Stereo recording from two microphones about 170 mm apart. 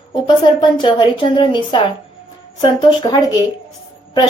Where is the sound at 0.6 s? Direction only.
30° left (ahead or behind).